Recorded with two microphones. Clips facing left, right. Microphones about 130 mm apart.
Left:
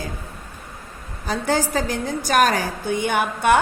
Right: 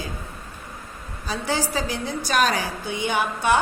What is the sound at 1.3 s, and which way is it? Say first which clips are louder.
A woman's voice: left 4 dB; 50° left (ahead or behind).